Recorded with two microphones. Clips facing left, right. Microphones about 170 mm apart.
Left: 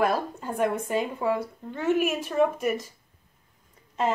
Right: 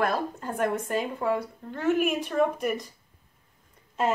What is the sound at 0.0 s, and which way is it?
Speech, 5° left (ahead or behind).